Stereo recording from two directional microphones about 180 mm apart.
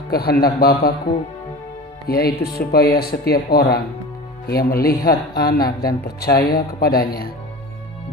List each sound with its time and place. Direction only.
0.1 s speech: 60° left (ahead or behind)
2.0 s speech: 60° left (ahead or behind)